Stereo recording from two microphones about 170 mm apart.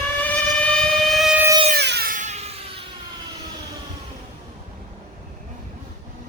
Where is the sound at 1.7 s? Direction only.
75° right (ahead or behind).